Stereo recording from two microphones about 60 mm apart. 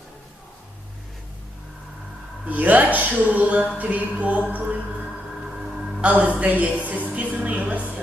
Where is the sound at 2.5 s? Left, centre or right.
Right.